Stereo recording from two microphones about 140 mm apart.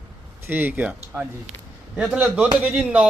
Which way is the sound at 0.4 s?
15° right (ahead or behind).